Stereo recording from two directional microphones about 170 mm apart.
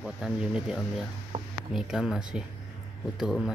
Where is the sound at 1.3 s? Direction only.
40° right (ahead or behind).